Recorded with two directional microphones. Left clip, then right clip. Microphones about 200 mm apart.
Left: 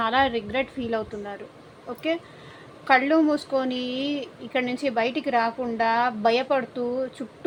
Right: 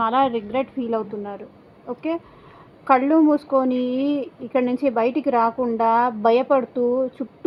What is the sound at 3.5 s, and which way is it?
A woman's voice, 45° right (ahead or behind).